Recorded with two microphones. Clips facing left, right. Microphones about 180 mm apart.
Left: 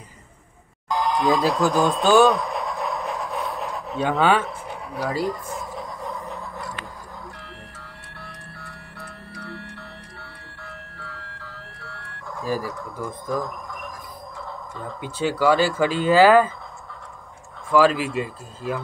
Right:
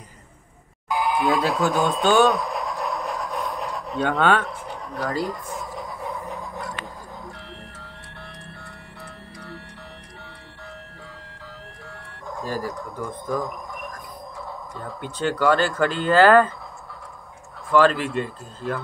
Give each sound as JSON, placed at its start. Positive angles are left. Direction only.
{"t": 0.8, "sound": "a sound", "side_deg": -10}
{"t": 7.8, "sound": "music", "side_deg": -20}
{"t": 11.0, "sound": "vehicle", "side_deg": -15}
{"t": 12.9, "sound": "speech", "side_deg": 10}
{"t": 14.8, "sound": "speech", "side_deg": 5}
{"t": 17.6, "sound": "speech", "side_deg": 5}